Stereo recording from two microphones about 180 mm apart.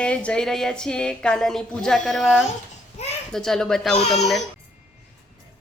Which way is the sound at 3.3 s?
Centre (ahead or behind).